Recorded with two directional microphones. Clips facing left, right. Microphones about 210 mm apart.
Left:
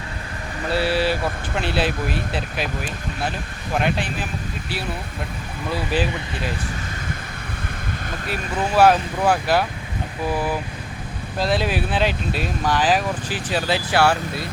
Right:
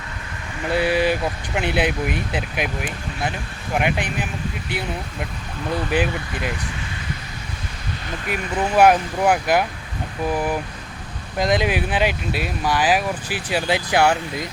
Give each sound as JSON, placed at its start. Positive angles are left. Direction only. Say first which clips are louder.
{"t": 0.7, "sound": "speech", "louder": "right 2 dB", "side_deg": -15}
{"t": 3.8, "sound": "speech", "louder": "even", "side_deg": -15}
{"t": 5.9, "sound": "speech", "louder": "right 1 dB", "side_deg": -15}
{"t": 8.3, "sound": "speech", "louder": "right 2 dB", "side_deg": -15}